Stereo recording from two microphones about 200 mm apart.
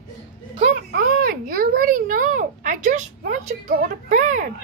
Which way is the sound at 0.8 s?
45° right (ahead or behind).